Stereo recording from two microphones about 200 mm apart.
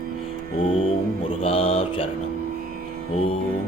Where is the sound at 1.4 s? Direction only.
30° left (ahead or behind).